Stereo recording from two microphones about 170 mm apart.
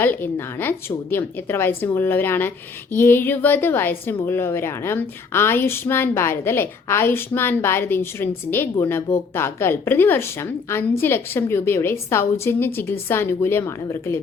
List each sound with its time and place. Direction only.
0.0 s a woman's voice: 10° left (ahead or behind)